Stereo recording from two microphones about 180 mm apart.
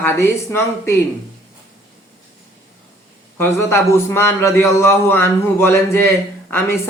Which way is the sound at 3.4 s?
15° left (ahead or behind).